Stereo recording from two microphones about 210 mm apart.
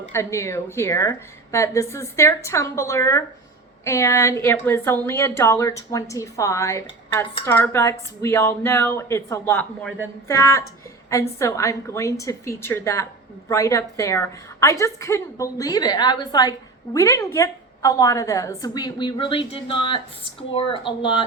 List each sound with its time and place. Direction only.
0.1 s a woman's voice: 15° left (ahead or behind)